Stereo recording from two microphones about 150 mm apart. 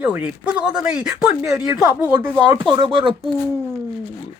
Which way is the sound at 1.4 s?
20° right (ahead or behind).